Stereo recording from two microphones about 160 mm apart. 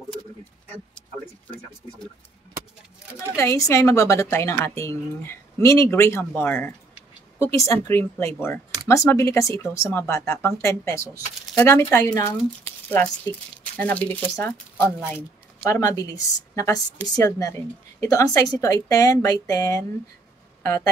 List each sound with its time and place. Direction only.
3.3 s speech: 15° left (ahead or behind)